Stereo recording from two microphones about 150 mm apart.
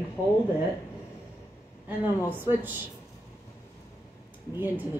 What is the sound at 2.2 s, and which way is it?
Speech, 15° right (ahead or behind).